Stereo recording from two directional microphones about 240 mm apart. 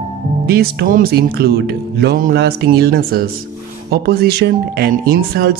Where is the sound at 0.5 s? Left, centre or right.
Right.